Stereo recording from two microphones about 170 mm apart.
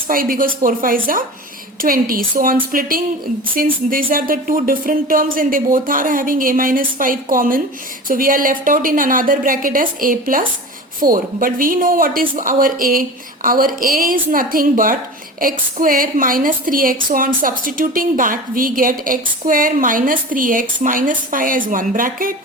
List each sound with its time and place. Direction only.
0.1 s a woman's voice: 55° right (ahead or behind)